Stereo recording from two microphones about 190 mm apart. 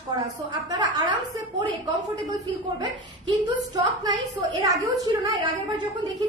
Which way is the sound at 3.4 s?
20° right (ahead or behind).